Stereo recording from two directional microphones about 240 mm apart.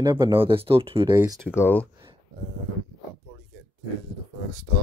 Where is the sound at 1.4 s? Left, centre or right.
Centre.